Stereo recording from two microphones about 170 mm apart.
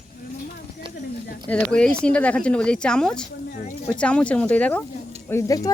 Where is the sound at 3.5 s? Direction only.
50° left (ahead or behind).